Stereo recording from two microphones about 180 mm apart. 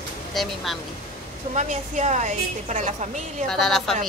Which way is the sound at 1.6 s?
40° right (ahead or behind).